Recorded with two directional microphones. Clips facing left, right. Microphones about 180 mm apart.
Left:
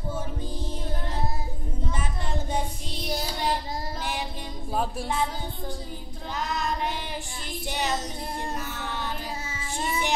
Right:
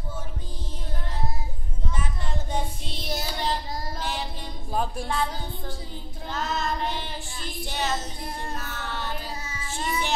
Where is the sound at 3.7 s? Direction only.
25° left (ahead or behind).